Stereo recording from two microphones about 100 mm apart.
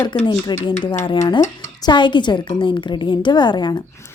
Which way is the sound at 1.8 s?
50° left (ahead or behind).